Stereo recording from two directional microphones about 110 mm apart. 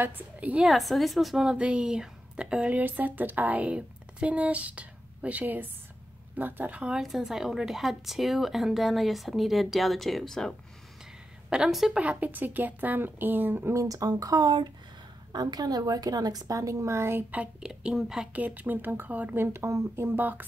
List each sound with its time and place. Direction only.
0.0 s a woman's voice: 15° right (ahead or behind)
0.7 s a woman's voice: centre (ahead or behind)
11.5 s a woman's voice: 5° right (ahead or behind); by 17.2 s 25° right (ahead or behind)
17.3 s a woman's voice: 10° right (ahead or behind)